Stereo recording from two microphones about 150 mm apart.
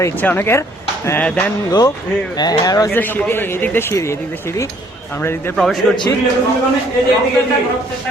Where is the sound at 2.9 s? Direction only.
10° left (ahead or behind).